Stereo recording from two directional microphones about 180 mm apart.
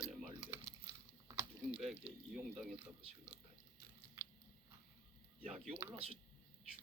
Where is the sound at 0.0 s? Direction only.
Centre (ahead or behind).